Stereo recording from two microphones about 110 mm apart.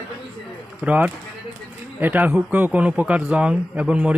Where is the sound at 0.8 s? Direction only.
15° right (ahead or behind).